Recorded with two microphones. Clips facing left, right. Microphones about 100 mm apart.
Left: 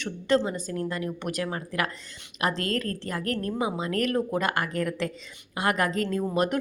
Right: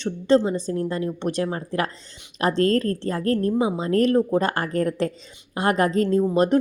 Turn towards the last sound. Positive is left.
turn(degrees=-30)  # may be behind; listen again after turning